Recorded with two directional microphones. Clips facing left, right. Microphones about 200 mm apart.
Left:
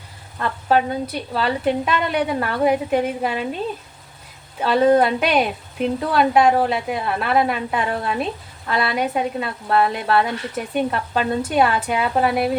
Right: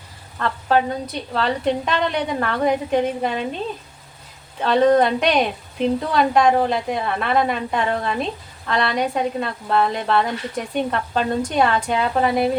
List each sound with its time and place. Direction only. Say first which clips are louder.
0.3 s speech: even; 10° left (ahead or behind)
4.6 s speech: even; 5° left (ahead or behind)